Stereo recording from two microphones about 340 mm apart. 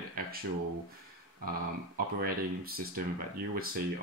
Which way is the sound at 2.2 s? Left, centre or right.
Right.